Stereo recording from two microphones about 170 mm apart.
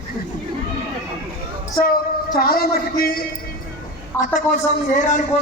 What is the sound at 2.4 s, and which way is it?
Speech, 60° left (ahead or behind).